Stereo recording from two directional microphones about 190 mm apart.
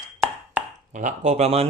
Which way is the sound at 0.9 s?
40° right (ahead or behind).